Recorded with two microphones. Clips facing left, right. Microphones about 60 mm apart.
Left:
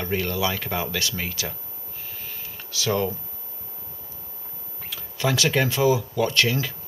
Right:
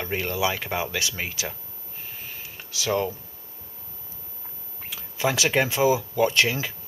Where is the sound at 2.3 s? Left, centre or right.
Centre.